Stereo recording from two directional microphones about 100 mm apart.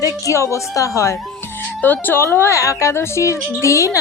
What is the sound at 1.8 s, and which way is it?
A woman's voice, 20° left (ahead or behind).